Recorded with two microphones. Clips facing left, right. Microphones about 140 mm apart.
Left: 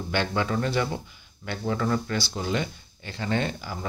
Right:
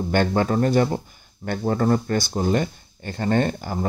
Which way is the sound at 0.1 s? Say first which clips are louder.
Right 6 dB; 45° right (ahead or behind).